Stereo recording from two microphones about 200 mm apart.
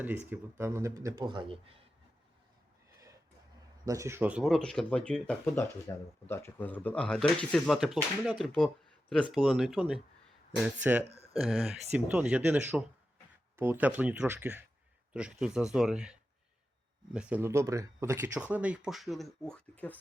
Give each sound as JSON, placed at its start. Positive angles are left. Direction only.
{"t": 0.3, "sound": "speech", "side_deg": -15}
{"t": 3.8, "sound": "speech", "side_deg": -15}
{"t": 5.9, "sound": "speech", "side_deg": 15}
{"t": 11.1, "sound": "a sound", "side_deg": -30}
{"t": 11.3, "sound": "speech", "side_deg": 0}
{"t": 17.2, "sound": "speech", "side_deg": -5}